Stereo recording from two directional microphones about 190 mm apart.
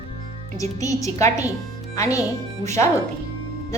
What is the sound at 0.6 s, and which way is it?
A woman's voice, 15° left (ahead or behind).